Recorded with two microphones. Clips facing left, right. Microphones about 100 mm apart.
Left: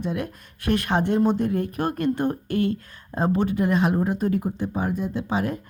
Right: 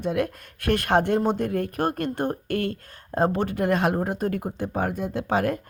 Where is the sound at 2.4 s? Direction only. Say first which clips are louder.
Left 3 dB; 55° right (ahead or behind).